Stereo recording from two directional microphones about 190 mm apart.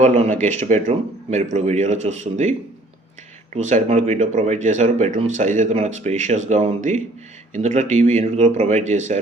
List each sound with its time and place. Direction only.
0.0 s speech: 40° right (ahead or behind)